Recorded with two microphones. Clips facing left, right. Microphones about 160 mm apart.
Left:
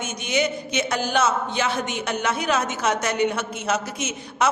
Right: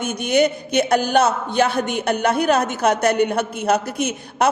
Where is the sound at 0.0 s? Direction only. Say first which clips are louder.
Right 7 dB; 55° right (ahead or behind).